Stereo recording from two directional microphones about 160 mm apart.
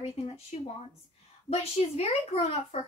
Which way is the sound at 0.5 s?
45° left (ahead or behind).